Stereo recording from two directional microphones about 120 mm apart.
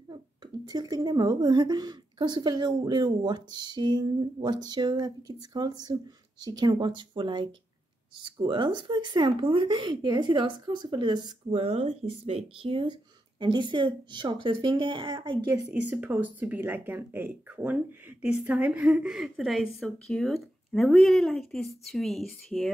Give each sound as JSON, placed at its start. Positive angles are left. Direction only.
{"t": 0.1, "sound": "speech", "side_deg": -35}
{"t": 11.6, "sound": "speech", "side_deg": -65}
{"t": 15.7, "sound": "speech", "side_deg": -10}